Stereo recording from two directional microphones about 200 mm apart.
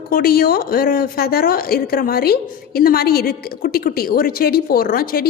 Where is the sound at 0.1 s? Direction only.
50° left (ahead or behind).